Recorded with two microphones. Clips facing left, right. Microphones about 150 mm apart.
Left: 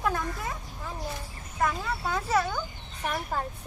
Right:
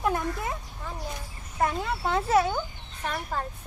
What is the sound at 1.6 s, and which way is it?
Speech, 25° right (ahead or behind).